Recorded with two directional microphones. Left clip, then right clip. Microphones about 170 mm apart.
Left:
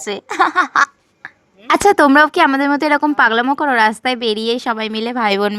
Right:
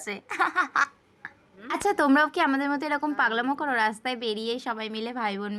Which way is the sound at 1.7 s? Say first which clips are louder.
Left 13 dB; 65° left (ahead or behind).